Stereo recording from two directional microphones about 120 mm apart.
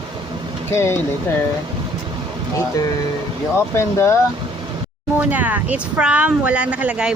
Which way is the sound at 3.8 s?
20° left (ahead or behind).